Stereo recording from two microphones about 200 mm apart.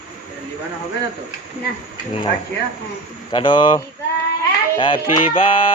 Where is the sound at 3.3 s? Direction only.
25° left (ahead or behind).